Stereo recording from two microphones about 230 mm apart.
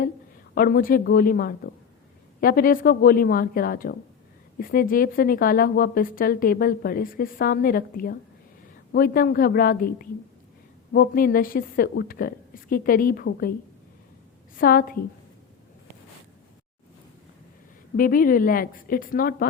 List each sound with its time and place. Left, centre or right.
0.5 s a woman's voice: left
14.5 s a woman's voice: left
17.9 s a woman's voice: left